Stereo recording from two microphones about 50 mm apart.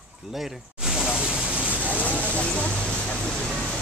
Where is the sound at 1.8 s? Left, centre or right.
Left.